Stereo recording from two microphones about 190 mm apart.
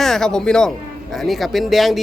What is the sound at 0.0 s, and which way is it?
Speech, 5° left (ahead or behind).